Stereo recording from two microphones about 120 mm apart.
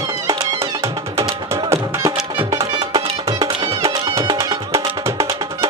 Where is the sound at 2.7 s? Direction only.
40° right (ahead or behind).